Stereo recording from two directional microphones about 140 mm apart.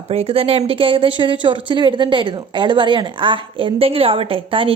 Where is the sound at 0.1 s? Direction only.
45° right (ahead or behind).